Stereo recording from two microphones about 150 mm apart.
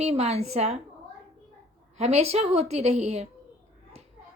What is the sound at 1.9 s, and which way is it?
A woman's voice, 45° right (ahead or behind).